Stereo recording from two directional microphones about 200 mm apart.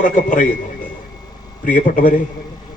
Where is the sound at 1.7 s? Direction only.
40° left (ahead or behind).